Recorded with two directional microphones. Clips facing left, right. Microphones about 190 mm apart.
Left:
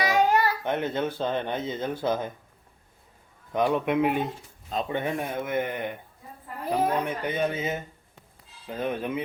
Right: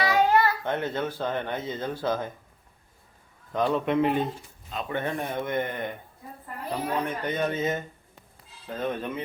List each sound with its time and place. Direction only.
0.0 s a child's voice: 15° left (ahead or behind)
3.5 s speech: 15° left (ahead or behind)
7.0 s speech: 10° left (ahead or behind)